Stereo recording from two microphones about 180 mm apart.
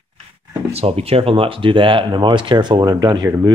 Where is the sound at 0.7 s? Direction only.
35° right (ahead or behind).